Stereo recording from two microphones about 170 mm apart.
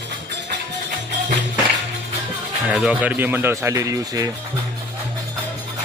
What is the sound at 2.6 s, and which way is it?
Speech, 5° right (ahead or behind).